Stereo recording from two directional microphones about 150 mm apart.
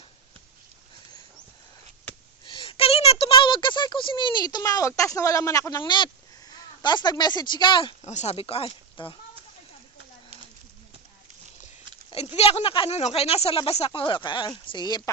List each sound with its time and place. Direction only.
2.4 s a sound: 35° left (ahead or behind)
5.8 s speech: 30° left (ahead or behind)
8.0 s speech: 50° left (ahead or behind)
12.4 s speech: 40° left (ahead or behind)